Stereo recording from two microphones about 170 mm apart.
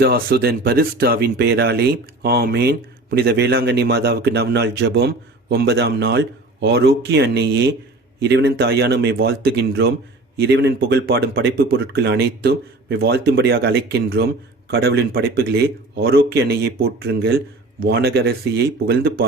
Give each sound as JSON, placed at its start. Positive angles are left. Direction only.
{"t": 0.0, "sound": "speech", "side_deg": -65}